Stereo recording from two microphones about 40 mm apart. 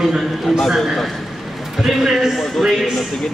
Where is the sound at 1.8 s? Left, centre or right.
Centre.